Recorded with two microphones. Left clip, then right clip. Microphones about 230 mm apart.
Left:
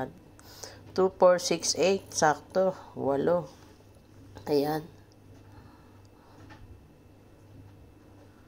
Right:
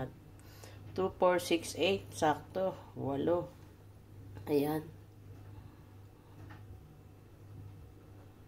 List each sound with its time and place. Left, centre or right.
0.0 s a sound: centre
1.7 s a woman's voice: centre
4.5 s a woman's voice: centre